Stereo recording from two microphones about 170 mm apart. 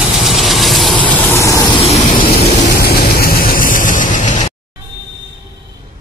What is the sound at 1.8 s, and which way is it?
Vehicle, 35° left (ahead or behind).